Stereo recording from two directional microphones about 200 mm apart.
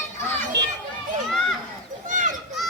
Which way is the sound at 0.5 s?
60° right (ahead or behind).